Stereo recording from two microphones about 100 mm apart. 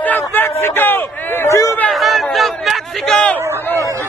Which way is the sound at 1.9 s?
Centre (ahead or behind).